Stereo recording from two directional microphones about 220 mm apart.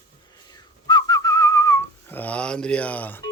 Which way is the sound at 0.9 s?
15° left (ahead or behind).